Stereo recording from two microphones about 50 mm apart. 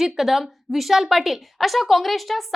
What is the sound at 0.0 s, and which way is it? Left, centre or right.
A woman's voice, centre.